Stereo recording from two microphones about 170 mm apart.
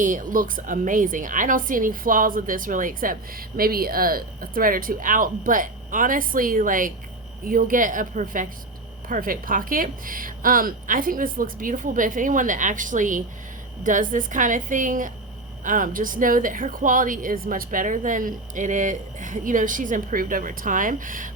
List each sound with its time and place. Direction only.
0.0 s a woman's voice: 50° right (ahead or behind)